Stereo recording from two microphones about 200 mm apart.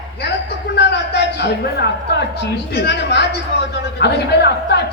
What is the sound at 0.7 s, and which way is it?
A woman's voice, 60° left (ahead or behind).